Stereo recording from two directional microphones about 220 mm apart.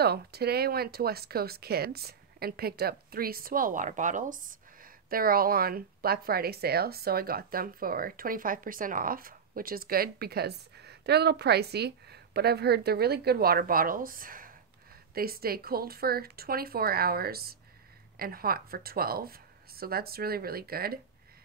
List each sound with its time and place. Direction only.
0.0 s speech: 45° right (ahead or behind)